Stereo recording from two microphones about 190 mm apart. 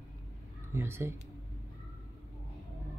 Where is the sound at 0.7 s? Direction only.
15° right (ahead or behind).